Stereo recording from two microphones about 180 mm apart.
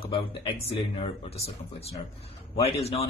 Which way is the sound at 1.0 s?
35° left (ahead or behind).